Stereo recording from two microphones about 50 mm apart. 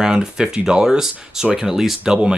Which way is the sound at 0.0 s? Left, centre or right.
Centre.